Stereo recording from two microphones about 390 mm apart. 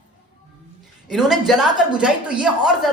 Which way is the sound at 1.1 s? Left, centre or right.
Centre.